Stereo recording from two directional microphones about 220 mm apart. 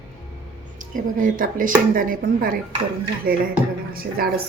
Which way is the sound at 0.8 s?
35° right (ahead or behind).